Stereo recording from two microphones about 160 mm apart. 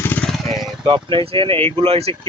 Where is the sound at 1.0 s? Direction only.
35° right (ahead or behind).